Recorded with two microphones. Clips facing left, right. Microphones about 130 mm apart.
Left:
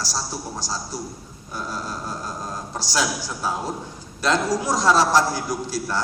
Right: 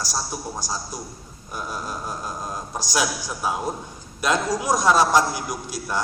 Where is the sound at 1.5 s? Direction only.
15° right (ahead or behind).